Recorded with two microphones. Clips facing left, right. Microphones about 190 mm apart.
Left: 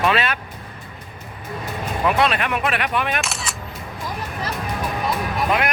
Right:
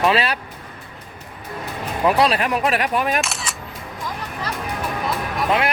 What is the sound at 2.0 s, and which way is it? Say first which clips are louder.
Speech: right 2 dB; 35° right (ahead or behind).